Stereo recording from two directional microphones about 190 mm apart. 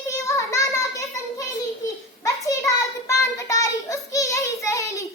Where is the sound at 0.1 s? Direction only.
15° left (ahead or behind).